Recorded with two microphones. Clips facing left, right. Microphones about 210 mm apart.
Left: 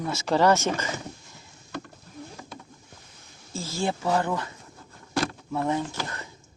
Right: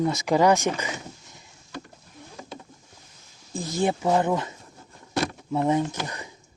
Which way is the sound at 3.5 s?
20° right (ahead or behind).